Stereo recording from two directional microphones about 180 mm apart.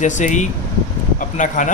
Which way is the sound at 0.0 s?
45° left (ahead or behind).